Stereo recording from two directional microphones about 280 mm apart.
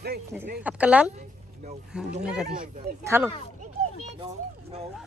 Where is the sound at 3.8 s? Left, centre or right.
Right.